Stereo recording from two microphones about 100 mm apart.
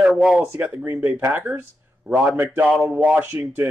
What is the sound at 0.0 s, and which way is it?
Speech, centre (ahead or behind).